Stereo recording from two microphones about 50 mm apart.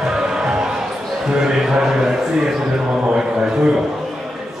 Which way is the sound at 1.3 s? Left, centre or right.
Centre.